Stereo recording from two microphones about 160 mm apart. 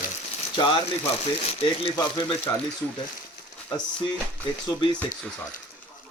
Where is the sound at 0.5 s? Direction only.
30° left (ahead or behind).